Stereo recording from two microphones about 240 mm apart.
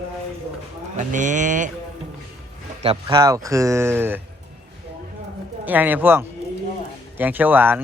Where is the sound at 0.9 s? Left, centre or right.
Right.